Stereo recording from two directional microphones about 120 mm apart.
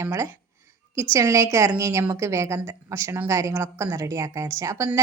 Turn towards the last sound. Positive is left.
turn(degrees=-25)  # may be behind; listen again after turning